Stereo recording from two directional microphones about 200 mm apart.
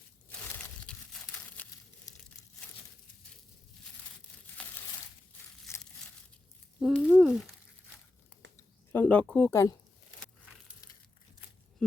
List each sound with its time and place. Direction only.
0.3 s tearing: 10° left (ahead or behind)
2.4 s crumpling: 5° left (ahead or behind)
5.7 s crushing: 15° left (ahead or behind)
6.7 s a sound: 5° right (ahead or behind)
8.9 s speech: 10° left (ahead or behind)
9.5 s speech: 15° left (ahead or behind)